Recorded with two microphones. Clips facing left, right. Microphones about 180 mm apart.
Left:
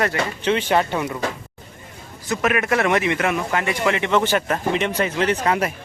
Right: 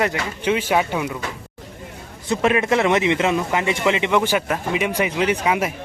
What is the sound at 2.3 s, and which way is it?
A man's voice, 25° right (ahead or behind).